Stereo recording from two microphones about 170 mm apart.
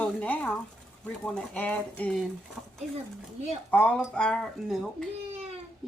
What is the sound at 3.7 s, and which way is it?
Speech, 10° left (ahead or behind).